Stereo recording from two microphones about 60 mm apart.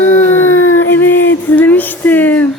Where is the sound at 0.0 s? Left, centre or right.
Left.